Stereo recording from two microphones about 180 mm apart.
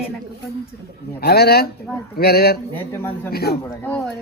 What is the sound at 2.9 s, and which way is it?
Speech, 10° left (ahead or behind).